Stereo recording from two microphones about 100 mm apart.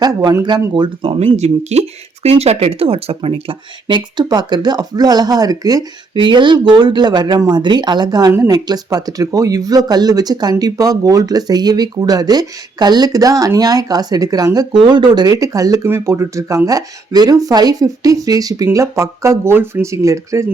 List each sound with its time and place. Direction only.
0.0 s speech: 40° right (ahead or behind)
1.0 s speech: 80° right; by 5.8 s 40° right (ahead or behind)
6.1 s speech: 50° right (ahead or behind); by 20.4 s 30° right (ahead or behind)